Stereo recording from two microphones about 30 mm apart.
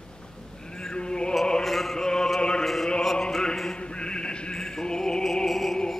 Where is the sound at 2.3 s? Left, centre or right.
Left.